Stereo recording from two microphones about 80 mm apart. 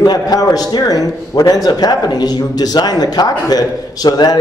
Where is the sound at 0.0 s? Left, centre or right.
Left.